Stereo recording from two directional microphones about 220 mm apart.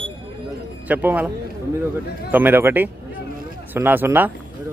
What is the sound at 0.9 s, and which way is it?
Speech, 5° right (ahead or behind).